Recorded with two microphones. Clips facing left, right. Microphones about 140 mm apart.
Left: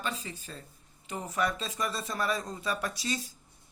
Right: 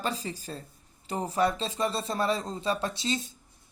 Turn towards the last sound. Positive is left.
turn(degrees=-25)  # may be behind; listen again after turning